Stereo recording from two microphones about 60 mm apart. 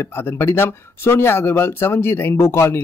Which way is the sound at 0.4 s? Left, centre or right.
Left.